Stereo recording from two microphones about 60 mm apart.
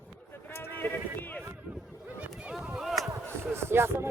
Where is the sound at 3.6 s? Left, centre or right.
Right.